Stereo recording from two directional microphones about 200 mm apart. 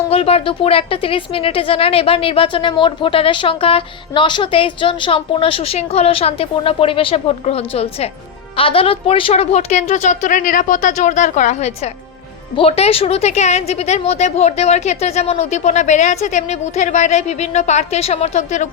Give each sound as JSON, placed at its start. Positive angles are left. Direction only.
{"t": 0.1, "sound": "a woman's voice", "side_deg": 30}